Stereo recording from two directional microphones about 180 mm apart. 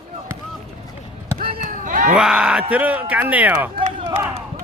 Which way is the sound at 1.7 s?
45° right (ahead or behind).